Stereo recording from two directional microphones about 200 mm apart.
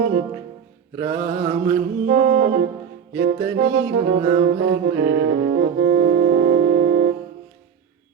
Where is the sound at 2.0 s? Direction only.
40° right (ahead or behind).